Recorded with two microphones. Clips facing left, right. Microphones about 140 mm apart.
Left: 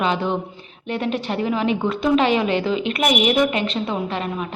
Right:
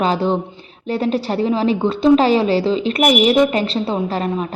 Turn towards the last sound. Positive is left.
turn(degrees=-35)  # may be behind; listen again after turning